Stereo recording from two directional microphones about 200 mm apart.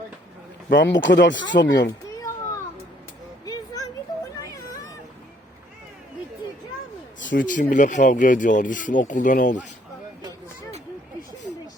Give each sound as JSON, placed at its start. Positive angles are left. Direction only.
{"t": 0.7, "sound": "speech", "side_deg": 65}
{"t": 1.9, "sound": "children playing", "side_deg": 15}
{"t": 3.4, "sound": "a sound", "side_deg": 20}
{"t": 7.3, "sound": "speech", "side_deg": 40}